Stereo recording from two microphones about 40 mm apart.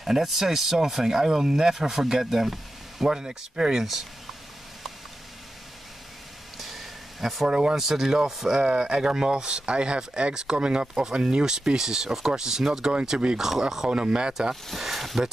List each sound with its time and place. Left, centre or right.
0.0 s speech: centre
6.6 s a sound: centre
7.4 s speech: right
7.7 s speech: centre
13.8 s speech: right
14.5 s speech: centre